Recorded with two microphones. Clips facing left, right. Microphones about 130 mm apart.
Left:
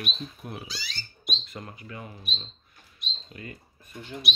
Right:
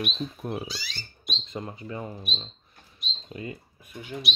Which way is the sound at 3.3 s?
20° right (ahead or behind).